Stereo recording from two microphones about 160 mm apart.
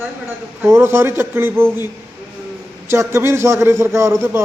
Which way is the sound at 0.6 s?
15° right (ahead or behind).